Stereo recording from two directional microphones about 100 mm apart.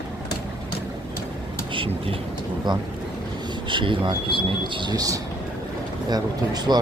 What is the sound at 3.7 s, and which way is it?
Speech, 55° right (ahead or behind).